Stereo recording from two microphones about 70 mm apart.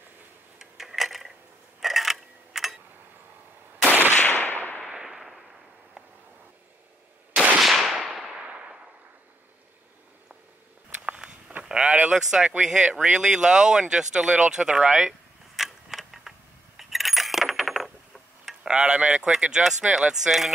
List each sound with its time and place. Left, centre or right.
0.6 s a sound: centre
4.2 s gunshot: left
4.8 s a sound: centre
7.5 s whip: centre
8.5 s a sound: centre
11.0 s walk: centre
11.6 s vehicle: centre
12.2 s speech: centre
14.4 s mechanisms: centre
18.4 s speech: centre